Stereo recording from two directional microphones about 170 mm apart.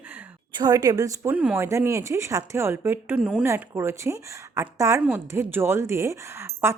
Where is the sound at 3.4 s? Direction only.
15° right (ahead or behind).